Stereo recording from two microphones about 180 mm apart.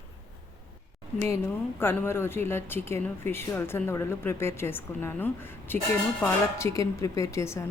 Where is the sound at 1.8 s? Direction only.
10° left (ahead or behind).